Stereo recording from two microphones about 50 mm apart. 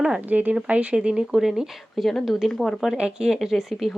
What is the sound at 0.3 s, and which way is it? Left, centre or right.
Speech, right.